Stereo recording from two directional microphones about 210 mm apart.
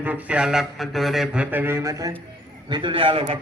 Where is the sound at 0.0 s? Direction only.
5° right (ahead or behind).